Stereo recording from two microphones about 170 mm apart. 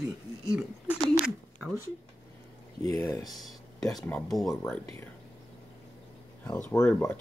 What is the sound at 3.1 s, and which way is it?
Speech, 20° left (ahead or behind).